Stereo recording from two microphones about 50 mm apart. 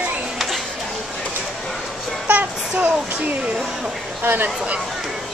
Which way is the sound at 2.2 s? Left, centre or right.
Right.